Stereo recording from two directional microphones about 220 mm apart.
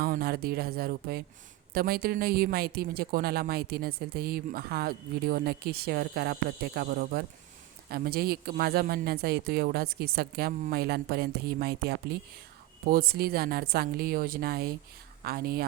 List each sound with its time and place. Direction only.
0.0 s speech: 45° right (ahead or behind)